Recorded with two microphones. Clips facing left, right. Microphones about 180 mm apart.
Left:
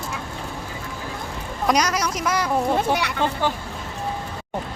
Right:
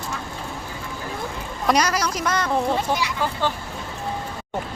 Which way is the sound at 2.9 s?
60° left (ahead or behind).